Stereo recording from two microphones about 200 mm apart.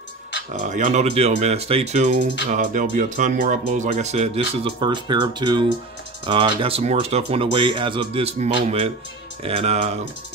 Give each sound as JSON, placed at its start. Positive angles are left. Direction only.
{"t": 0.7, "sound": "speech", "side_deg": -35}